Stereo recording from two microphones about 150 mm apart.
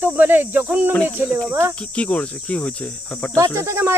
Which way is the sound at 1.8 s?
10° left (ahead or behind).